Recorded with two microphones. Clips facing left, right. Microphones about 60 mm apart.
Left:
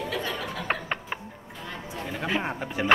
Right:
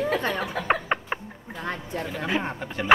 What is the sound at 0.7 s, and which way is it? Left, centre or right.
Music, centre.